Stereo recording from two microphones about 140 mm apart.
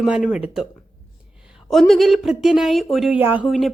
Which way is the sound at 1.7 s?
Centre (ahead or behind).